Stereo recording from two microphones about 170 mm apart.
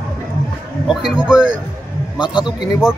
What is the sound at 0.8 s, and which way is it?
Speech, 5° right (ahead or behind).